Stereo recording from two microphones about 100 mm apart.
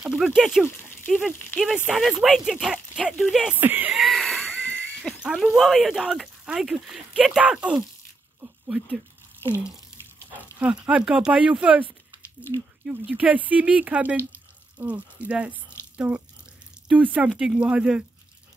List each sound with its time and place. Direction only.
0.1 s speech: 5° right (ahead or behind)
1.9 s speech: centre (ahead or behind)
3.5 s speech: 20° right (ahead or behind)
4.0 s a sound: centre (ahead or behind)
4.6 s a sound: 15° left (ahead or behind)
5.2 s speech: 5° right (ahead or behind)
10.3 s speech: 15° right (ahead or behind)